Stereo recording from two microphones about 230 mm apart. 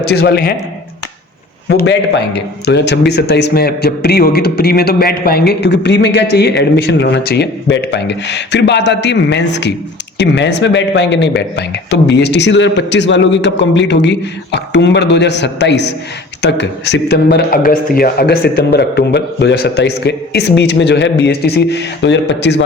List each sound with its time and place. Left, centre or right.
0.0 s a man's voice: left
1.7 s a man's voice: left